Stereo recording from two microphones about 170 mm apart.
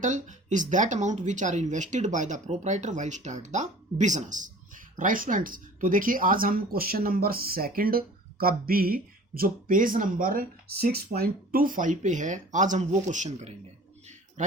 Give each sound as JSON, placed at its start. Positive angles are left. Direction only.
{"t": 0.0, "sound": "speech", "side_deg": -45}